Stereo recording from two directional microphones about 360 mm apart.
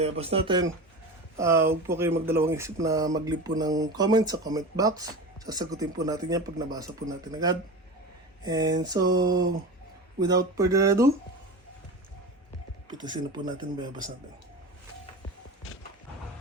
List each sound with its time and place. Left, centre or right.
0.0 s speech: centre
12.9 s speech: centre